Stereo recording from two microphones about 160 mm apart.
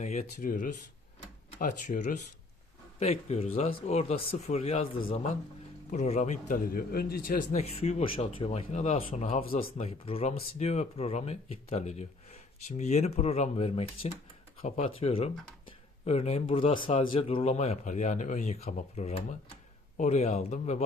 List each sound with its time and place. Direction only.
0.0 s a man's voice: 45° left (ahead or behind)
0.3 s speech: 55° left (ahead or behind)
3.0 s speech: 40° left (ahead or behind)
5.9 s a man's voice: 50° left (ahead or behind)
7.6 s a man's voice: 40° left (ahead or behind)